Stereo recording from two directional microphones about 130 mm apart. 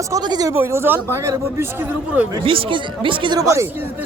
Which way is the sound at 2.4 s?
45° right (ahead or behind).